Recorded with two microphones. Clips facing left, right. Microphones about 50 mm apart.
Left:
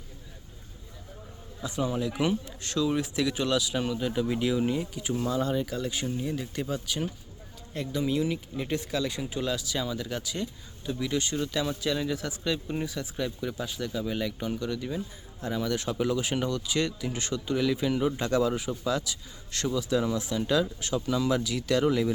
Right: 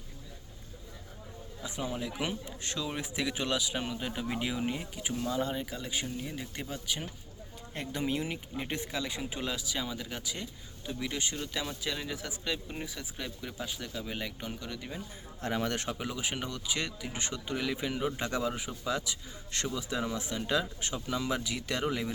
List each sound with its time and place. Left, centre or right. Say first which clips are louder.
1.6 s speech: left 7 dB; centre
7.7 s speech: left 5 dB; right; by 15.0 s centre
15.4 s speech: left 2 dB; right
15.9 s speech: left 7 dB; centre